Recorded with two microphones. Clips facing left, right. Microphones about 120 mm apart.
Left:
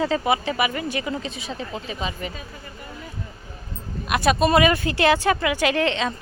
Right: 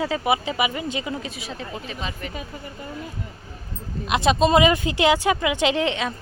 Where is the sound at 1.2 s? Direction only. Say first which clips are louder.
Left 2 dB; 5° right (ahead or behind).